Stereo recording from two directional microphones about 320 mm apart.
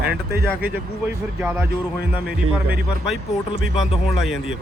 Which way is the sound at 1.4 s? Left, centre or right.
Centre.